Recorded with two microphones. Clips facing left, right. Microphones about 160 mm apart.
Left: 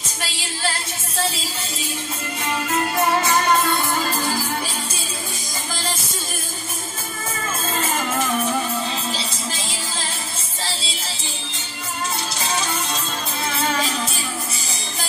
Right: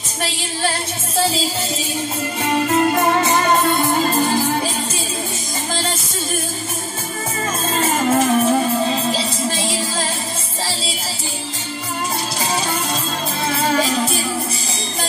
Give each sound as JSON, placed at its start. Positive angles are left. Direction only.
{"t": 2.7, "sound": "music", "side_deg": -30}
{"t": 7.7, "sound": "music", "side_deg": -35}